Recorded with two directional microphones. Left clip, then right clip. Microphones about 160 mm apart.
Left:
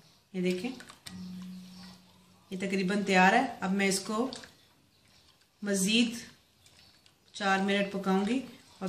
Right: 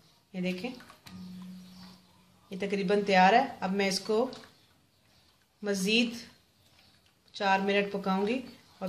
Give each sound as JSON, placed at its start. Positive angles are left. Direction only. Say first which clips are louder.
{"t": 0.3, "sound": "speech", "louder": "left 3 dB", "side_deg": -40}
{"t": 2.5, "sound": "speech", "louder": "right 4 dB", "side_deg": -40}
{"t": 5.6, "sound": "speech", "louder": "right 1 dB", "side_deg": -40}
{"t": 7.3, "sound": "speech", "louder": "right 2 dB", "side_deg": -35}